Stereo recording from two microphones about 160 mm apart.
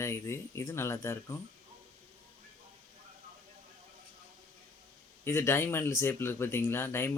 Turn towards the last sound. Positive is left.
turn(degrees=15)  # may be behind; listen again after turning